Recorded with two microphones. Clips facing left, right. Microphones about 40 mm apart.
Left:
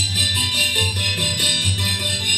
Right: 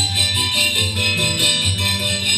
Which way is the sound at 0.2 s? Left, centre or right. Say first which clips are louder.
Right 1 dB; right.